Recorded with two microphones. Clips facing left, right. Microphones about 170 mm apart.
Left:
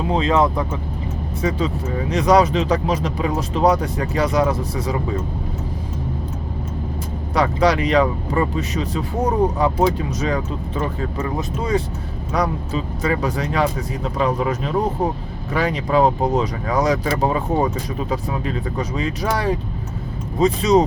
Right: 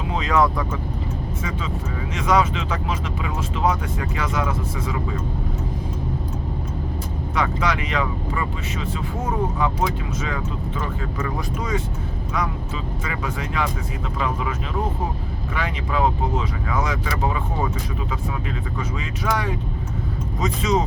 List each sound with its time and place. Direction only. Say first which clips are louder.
0.1 s speech: left 2 dB; 30° left (ahead or behind)
1.4 s speech: left 7 dB; 35° left (ahead or behind)
7.3 s speech: left 7 dB; 35° left (ahead or behind)